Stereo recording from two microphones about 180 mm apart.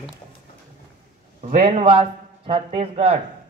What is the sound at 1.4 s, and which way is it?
Speech, 40° right (ahead or behind).